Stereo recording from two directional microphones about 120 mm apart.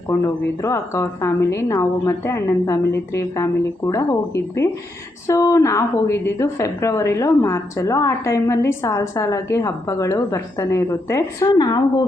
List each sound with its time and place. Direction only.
0.6 s a woman's voice: 25° left (ahead or behind)
11.4 s speech: 35° left (ahead or behind)